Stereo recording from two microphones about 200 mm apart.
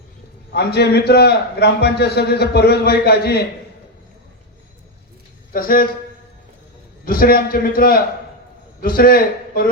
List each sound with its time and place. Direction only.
0.5 s a man's voice: 55° left (ahead or behind)
5.5 s a man's voice: 45° left (ahead or behind)
7.0 s a man's voice: 45° left (ahead or behind)